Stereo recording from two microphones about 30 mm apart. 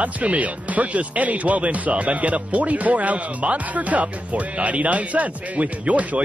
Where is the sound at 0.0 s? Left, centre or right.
Right.